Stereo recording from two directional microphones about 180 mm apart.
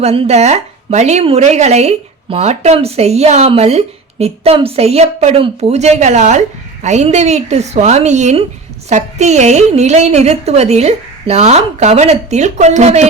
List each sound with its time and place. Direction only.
0.0 s a woman's voice: 35° right (ahead or behind)